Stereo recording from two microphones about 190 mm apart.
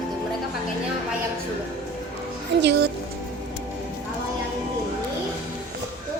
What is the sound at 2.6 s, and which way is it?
Speech, 60° right (ahead or behind).